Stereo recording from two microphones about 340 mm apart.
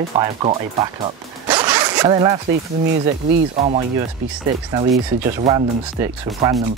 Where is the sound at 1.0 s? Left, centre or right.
Centre.